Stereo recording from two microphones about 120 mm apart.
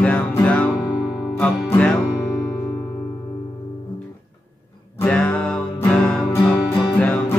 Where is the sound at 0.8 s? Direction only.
35° left (ahead or behind).